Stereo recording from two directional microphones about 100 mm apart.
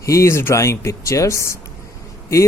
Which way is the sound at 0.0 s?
30° left (ahead or behind).